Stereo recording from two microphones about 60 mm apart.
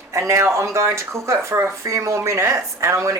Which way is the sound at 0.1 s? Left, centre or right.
Right.